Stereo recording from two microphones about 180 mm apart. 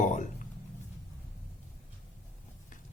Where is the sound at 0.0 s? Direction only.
45° left (ahead or behind).